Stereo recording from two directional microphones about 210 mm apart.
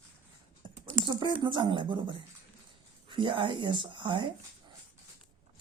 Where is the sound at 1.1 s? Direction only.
20° right (ahead or behind).